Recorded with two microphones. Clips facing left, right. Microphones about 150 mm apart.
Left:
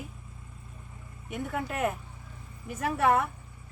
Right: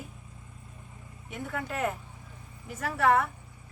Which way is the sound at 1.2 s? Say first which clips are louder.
Left 2 dB; 15° left (ahead or behind).